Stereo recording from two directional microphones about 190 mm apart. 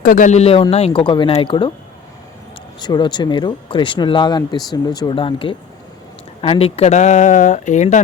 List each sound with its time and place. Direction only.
0.0 s speech: 45° left (ahead or behind); by 1.7 s 25° left (ahead or behind)
2.8 s speech: 25° left (ahead or behind); by 8.0 s 40° left (ahead or behind)